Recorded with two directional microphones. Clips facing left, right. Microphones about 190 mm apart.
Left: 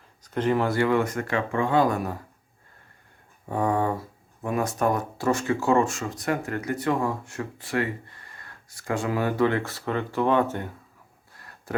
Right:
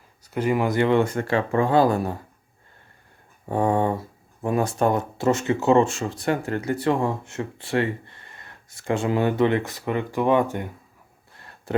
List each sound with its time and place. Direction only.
0.3 s speech: 10° right (ahead or behind); by 2.1 s 30° right (ahead or behind)
3.5 s speech: 25° right (ahead or behind)
11.3 s a sound: 25° right (ahead or behind)